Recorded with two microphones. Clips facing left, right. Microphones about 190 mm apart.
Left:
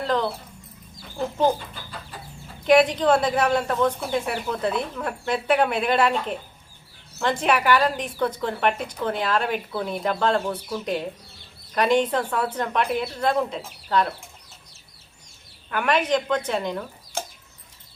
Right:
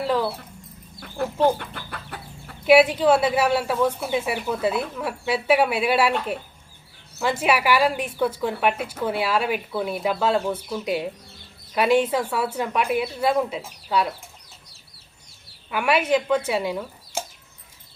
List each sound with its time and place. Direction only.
0.0 s dog: 5° right (ahead or behind)
1.5 s chicken: 65° right (ahead or behind)
2.6 s speech: 5° right (ahead or behind)
15.7 s speech: 10° right (ahead or behind)